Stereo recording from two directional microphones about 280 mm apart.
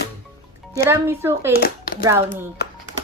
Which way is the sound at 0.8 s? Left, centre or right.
Centre.